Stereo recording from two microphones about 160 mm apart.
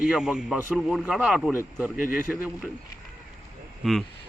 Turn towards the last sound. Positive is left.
turn(degrees=0)  # may be behind; listen again after turning